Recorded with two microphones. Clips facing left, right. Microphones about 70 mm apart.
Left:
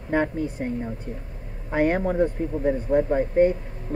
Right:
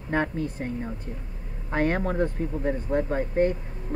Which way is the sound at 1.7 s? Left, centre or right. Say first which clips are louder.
Left 3 dB; centre.